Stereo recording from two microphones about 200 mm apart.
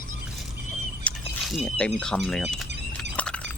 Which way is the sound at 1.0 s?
Centre (ahead or behind).